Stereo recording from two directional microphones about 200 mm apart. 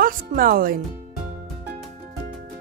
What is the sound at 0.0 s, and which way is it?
Speech, 45° right (ahead or behind).